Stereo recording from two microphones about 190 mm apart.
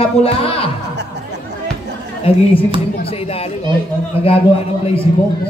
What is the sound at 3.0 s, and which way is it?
Speech, 30° left (ahead or behind).